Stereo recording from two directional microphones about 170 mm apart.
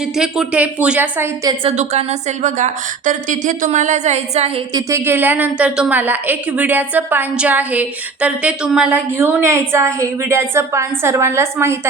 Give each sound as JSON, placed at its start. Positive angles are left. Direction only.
{"t": 0.0, "sound": "a woman's voice", "side_deg": -5}
{"t": 1.7, "sound": "a woman's voice", "side_deg": -40}
{"t": 4.7, "sound": "a woman's voice", "side_deg": -15}